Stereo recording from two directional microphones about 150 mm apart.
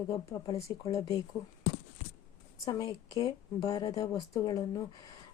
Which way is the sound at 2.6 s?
25° left (ahead or behind).